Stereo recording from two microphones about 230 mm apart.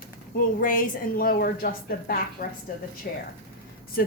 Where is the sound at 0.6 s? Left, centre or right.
Left.